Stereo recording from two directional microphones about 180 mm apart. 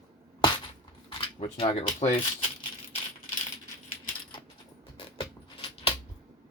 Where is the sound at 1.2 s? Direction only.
30° left (ahead or behind).